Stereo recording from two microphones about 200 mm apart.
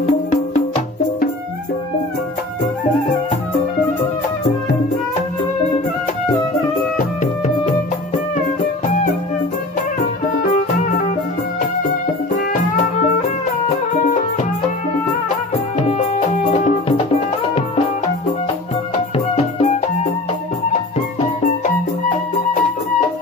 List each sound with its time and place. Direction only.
0.0 s music: 35° left (ahead or behind)
7.2 s music: 35° left (ahead or behind)
12.7 s music: 35° left (ahead or behind)
16.5 s music: 35° left (ahead or behind)
19.1 s music: 35° left (ahead or behind)